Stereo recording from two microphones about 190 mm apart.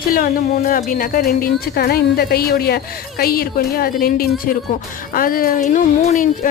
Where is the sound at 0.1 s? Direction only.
50° left (ahead or behind).